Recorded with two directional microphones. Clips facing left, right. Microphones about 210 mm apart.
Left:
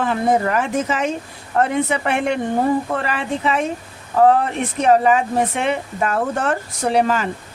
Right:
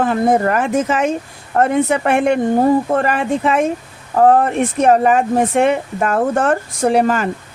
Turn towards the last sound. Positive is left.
turn(degrees=-50)  # may be behind; listen again after turning